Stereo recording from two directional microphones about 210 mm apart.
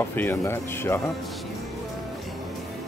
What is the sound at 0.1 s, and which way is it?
Speech, 10° left (ahead or behind).